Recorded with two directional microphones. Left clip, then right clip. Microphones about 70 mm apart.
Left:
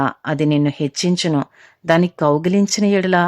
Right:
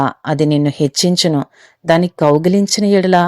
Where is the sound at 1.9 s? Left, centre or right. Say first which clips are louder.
Right 3 dB; right.